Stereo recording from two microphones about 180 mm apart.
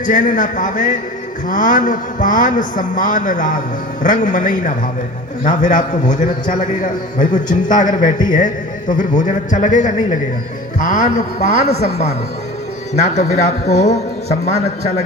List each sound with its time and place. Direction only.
0.0 s a man's voice: 45° left (ahead or behind)